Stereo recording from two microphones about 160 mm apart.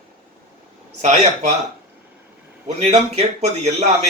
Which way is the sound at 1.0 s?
45° right (ahead or behind).